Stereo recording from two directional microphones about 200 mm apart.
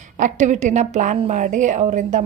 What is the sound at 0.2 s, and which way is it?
A woman's voice, 35° right (ahead or behind).